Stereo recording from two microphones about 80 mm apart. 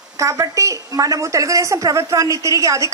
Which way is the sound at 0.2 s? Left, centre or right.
Right.